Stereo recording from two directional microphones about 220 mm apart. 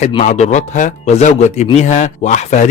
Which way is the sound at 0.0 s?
30° left (ahead or behind).